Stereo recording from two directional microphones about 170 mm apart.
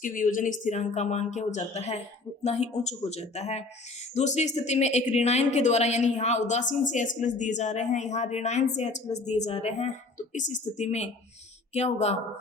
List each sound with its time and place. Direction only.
0.0 s a woman's voice: 50° left (ahead or behind)